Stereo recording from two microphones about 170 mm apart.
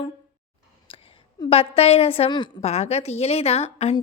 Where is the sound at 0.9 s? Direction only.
30° left (ahead or behind).